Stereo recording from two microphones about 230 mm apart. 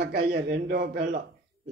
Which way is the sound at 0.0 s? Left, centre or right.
Right.